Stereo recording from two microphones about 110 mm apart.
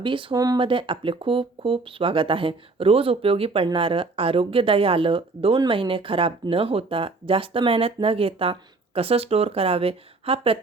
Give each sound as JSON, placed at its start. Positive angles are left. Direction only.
{"t": 0.0, "sound": "speech", "side_deg": -50}
{"t": 0.3, "sound": "speech", "side_deg": -35}
{"t": 0.6, "sound": "speech", "side_deg": -50}